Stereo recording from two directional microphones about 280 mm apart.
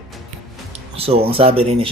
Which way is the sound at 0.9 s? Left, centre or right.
Right.